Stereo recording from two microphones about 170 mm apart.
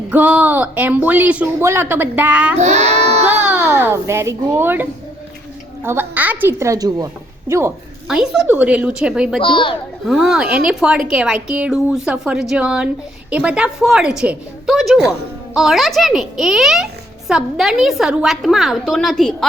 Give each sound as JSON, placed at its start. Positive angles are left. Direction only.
{"t": 0.1, "sound": "speech", "side_deg": -5}
{"t": 2.6, "sound": "a sound", "side_deg": -40}
{"t": 3.5, "sound": "speech", "side_deg": -10}
{"t": 8.0, "sound": "a child's voice", "side_deg": -5}
{"t": 9.4, "sound": "speech", "side_deg": 30}
{"t": 10.1, "sound": "a child's voice", "side_deg": -5}